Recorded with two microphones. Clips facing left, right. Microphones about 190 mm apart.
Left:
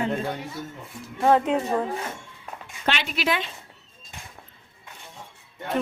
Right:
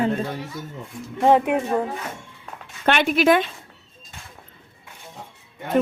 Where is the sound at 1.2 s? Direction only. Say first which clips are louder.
Right 3 dB; 15° right (ahead or behind).